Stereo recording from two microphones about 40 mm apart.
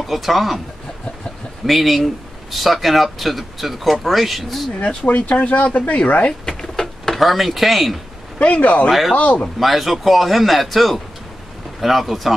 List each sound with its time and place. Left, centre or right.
0.0 s speech: centre
1.7 s speech: centre
4.7 s speech: left
5.2 s speech: left
6.4 s a sound: centre
7.2 s speech: centre
8.4 s speech: left
9.6 s speech: centre